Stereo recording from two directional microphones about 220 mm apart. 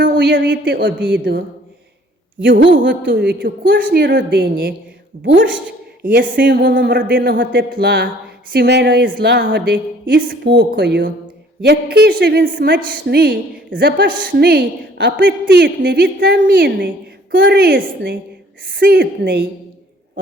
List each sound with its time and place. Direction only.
0.2 s a woman's voice: 45° right (ahead or behind)
2.4 s a woman's voice: 55° right (ahead or behind)
6.1 s a woman's voice: 40° right (ahead or behind)